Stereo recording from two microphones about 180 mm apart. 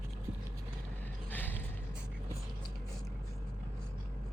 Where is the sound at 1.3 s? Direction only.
10° left (ahead or behind).